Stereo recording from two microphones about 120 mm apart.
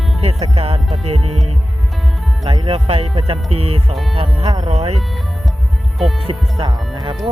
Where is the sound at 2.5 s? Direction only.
50° right (ahead or behind).